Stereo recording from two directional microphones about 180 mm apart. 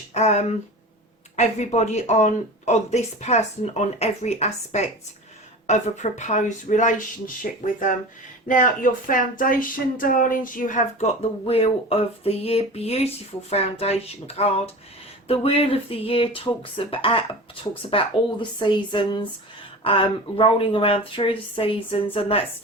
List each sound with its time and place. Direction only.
0.1 s speech: 40° left (ahead or behind)